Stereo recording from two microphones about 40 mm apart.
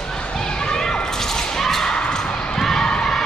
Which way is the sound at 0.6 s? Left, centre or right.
Centre.